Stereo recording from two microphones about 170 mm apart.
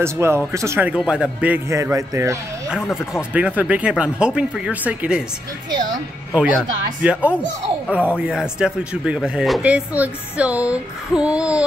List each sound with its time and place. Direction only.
0.0 s speech: 15° right (ahead or behind)
2.7 s speech: 5° right (ahead or behind)
7.0 s speech: 10° right (ahead or behind)